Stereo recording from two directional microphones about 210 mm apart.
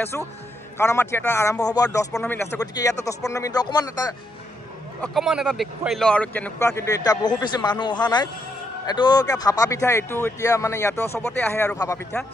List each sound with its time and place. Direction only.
0.7 s speech: 10° left (ahead or behind)
5.0 s speech: centre (ahead or behind)